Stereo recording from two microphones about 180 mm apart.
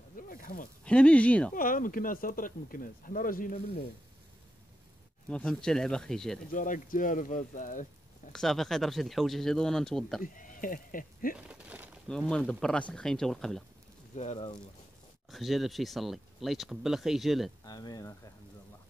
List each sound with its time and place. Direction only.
0.1 s a sound: 50° left (ahead or behind)
0.8 s speech: 5° left (ahead or behind)
1.5 s speech: 50° left (ahead or behind)
5.3 s speech: 5° left (ahead or behind)
6.5 s speech: 50° left (ahead or behind)
8.3 s speech: centre (ahead or behind)
10.2 s speech: 50° left (ahead or behind)
11.3 s a sound: 5° right (ahead or behind)
12.1 s speech: 5° left (ahead or behind)
14.1 s speech: 40° left (ahead or behind)
15.3 s speech: centre (ahead or behind)
17.6 s speech: 20° left (ahead or behind)